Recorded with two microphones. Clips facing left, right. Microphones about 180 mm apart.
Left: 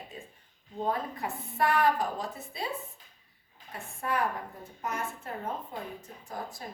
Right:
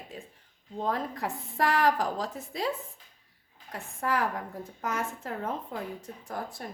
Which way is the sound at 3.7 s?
90° right.